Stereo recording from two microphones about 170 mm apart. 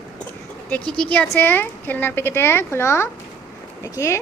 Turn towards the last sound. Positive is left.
turn(degrees=15)  # may be behind; listen again after turning